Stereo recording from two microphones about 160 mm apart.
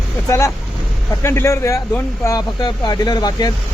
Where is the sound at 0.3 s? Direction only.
20° left (ahead or behind).